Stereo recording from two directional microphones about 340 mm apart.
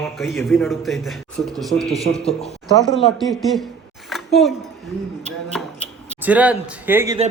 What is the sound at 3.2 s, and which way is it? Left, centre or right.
Speech, centre.